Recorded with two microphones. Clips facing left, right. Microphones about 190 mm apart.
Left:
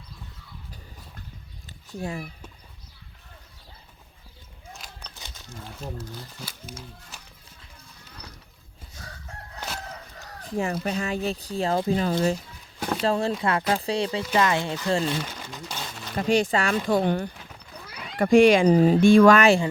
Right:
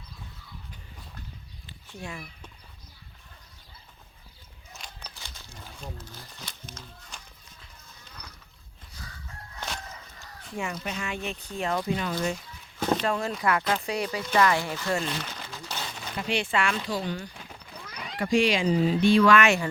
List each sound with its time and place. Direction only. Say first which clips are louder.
1.9 s speech: left 7 dB; 40° left (ahead or behind)
4.7 s a sound: left 2 dB; centre (ahead or behind)
5.1 s a sound: left 3 dB; 20° left (ahead or behind)
5.8 s speech: left 6 dB; 5° left (ahead or behind)
9.6 s crowing: left 1 dB; 5° left (ahead or behind)
10.4 s speech: left 7 dB; 35° left (ahead or behind)
15.1 s speech: left 5 dB; 10° left (ahead or behind)
16.1 s speech: left 6 dB; 40° left (ahead or behind)
16.9 s speech: left 9 dB; 55° left (ahead or behind); by 19.6 s 35° left (ahead or behind)